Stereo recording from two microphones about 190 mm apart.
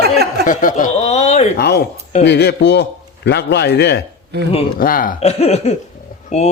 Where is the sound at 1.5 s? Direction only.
55° left (ahead or behind).